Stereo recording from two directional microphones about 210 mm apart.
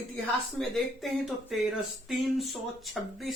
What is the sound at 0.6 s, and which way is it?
Speech, centre (ahead or behind).